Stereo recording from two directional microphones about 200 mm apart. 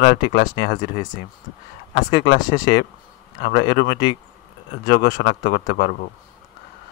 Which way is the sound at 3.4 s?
55° left (ahead or behind).